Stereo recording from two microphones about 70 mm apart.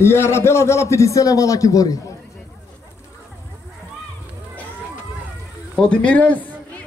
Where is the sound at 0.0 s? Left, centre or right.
Left.